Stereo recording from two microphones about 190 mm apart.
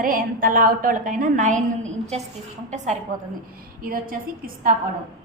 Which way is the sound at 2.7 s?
40° right (ahead or behind).